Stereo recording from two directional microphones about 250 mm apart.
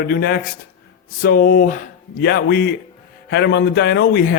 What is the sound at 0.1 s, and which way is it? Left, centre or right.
Speech, left.